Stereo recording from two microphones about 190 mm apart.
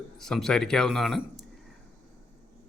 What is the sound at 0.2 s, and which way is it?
Speech, centre (ahead or behind).